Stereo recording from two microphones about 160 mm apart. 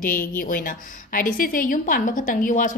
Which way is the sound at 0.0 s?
60° left (ahead or behind).